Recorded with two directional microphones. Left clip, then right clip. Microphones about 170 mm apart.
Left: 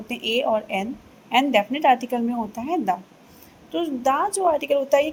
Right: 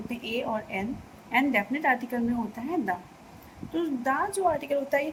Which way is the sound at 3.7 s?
40° left (ahead or behind).